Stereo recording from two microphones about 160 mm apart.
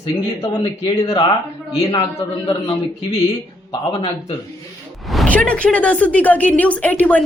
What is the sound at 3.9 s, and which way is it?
Speech, 30° left (ahead or behind).